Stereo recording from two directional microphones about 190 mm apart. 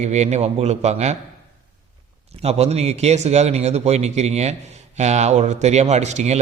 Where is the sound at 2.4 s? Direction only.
35° right (ahead or behind).